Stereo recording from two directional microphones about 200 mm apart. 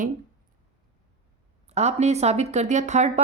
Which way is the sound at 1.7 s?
35° right (ahead or behind).